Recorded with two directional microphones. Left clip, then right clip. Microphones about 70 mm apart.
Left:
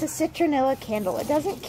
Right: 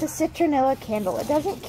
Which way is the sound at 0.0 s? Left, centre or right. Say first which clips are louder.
Right 1 dB; centre.